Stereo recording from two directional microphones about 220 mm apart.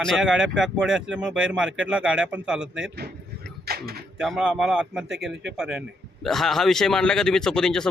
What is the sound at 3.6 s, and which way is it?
Speech, 45° right (ahead or behind).